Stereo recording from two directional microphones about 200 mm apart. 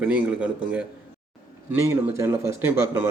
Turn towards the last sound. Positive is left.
turn(degrees=-15)  # may be behind; listen again after turning